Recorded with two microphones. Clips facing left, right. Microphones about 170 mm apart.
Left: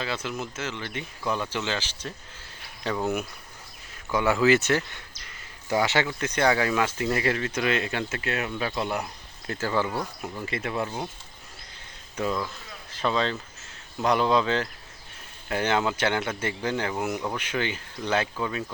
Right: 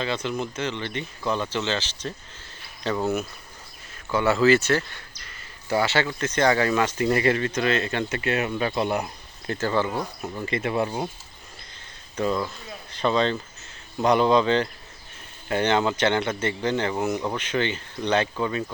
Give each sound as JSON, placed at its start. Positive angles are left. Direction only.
{"t": 0.0, "sound": "speech", "side_deg": 5}
{"t": 4.1, "sound": "speech", "side_deg": 15}
{"t": 12.1, "sound": "speech", "side_deg": 5}